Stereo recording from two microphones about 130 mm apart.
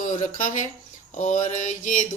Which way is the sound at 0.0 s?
80° left.